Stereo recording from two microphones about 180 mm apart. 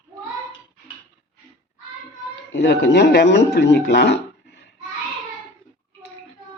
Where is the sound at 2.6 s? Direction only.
70° left (ahead or behind).